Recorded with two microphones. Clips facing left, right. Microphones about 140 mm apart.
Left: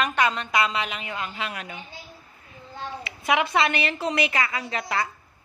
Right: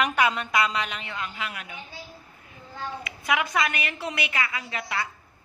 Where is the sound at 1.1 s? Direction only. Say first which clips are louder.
Left 2 dB; 25° left (ahead or behind).